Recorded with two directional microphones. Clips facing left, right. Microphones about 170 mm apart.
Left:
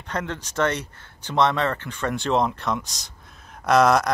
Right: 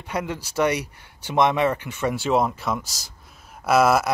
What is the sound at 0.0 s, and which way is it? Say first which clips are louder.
Speech: right 2 dB; 10° right (ahead or behind).